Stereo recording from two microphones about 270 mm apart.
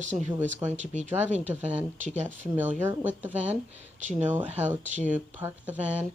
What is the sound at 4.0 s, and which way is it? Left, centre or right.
Speech, right.